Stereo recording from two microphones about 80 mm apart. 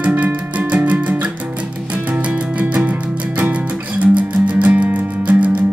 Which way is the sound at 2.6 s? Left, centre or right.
Right.